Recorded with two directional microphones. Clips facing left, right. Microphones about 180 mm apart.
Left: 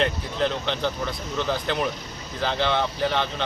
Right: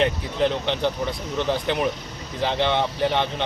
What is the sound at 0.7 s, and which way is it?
Speech, 20° right (ahead or behind).